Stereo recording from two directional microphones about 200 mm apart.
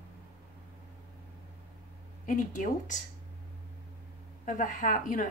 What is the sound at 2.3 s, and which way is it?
Speech, 40° left (ahead or behind).